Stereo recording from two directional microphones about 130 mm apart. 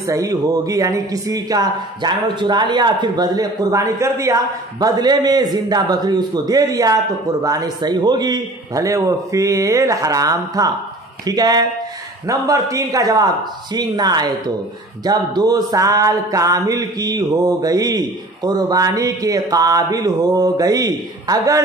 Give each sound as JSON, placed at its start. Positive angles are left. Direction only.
{"t": 0.0, "sound": "speech", "side_deg": -25}